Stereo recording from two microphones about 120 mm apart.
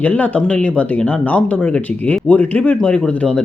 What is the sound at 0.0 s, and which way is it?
Speech, 10° left (ahead or behind).